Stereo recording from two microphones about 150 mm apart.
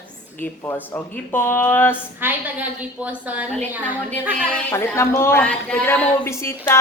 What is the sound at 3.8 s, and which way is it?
A woman's voice, 10° left (ahead or behind).